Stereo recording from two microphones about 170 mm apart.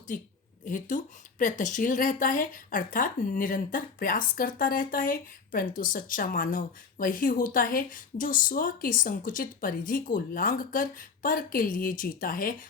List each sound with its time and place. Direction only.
0.6 s speech: 50° left (ahead or behind)